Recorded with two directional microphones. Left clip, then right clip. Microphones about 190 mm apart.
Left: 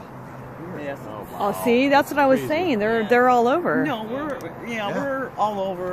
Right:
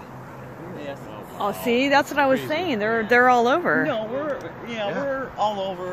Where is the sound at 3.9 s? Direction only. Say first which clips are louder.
Right 2 dB; 55° left (ahead or behind).